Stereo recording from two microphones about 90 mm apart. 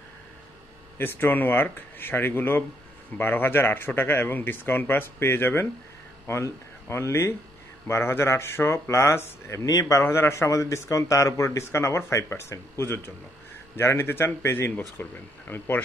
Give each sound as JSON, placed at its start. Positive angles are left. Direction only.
{"t": 0.9, "sound": "speech", "side_deg": 25}
{"t": 9.7, "sound": "speech", "side_deg": 40}